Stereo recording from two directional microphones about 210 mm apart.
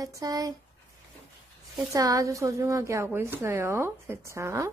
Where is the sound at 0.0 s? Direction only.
15° right (ahead or behind).